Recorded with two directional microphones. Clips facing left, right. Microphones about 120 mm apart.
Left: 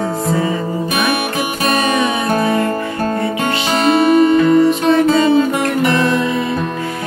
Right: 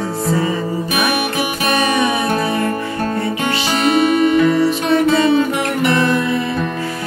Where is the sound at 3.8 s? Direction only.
35° left (ahead or behind).